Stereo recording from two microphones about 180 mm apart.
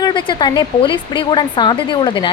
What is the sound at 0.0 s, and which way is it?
Speech, 25° left (ahead or behind).